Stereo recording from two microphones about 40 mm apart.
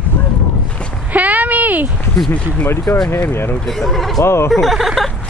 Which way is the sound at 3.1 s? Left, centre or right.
Left.